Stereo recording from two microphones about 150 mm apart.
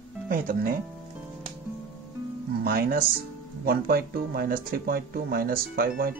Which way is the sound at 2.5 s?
90° right.